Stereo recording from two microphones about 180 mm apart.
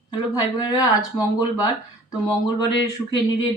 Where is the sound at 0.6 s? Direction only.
20° left (ahead or behind).